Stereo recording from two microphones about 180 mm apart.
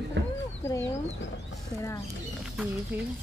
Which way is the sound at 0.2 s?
65° right (ahead or behind).